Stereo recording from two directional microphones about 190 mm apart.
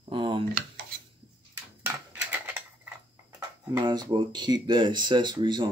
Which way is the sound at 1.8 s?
10° right (ahead or behind).